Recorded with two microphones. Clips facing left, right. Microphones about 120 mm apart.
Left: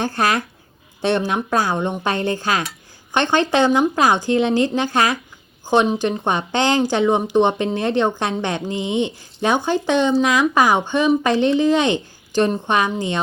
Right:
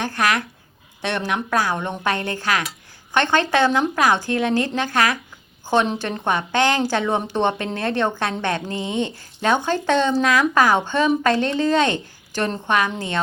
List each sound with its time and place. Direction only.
0.0 s a woman's voice: 30° left (ahead or behind)